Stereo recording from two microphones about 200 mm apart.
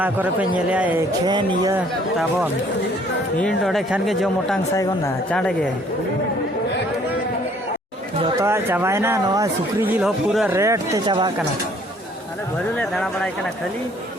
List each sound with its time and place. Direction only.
0.0 s speech: 10° right (ahead or behind)
1.2 s speech: 20° right (ahead or behind)
1.7 s speech: 5° right (ahead or behind)
3.6 s speech: centre (ahead or behind)
4.7 s speech: 15° left (ahead or behind)
5.3 s speech: 5° left (ahead or behind)
8.4 s speech: 15° right (ahead or behind)
10.6 s speech: 15° right (ahead or behind)
12.7 s speech: 5° left (ahead or behind)